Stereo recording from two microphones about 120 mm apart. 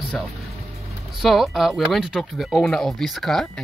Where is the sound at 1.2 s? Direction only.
Centre (ahead or behind).